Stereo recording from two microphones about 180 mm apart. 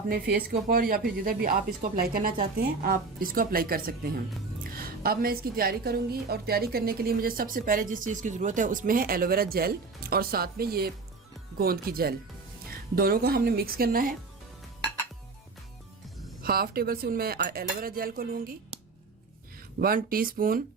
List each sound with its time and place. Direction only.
0.1 s a woman's voice: 55° right (ahead or behind)
16.4 s a woman's voice: 55° right (ahead or behind)
19.8 s a woman's voice: 55° right (ahead or behind)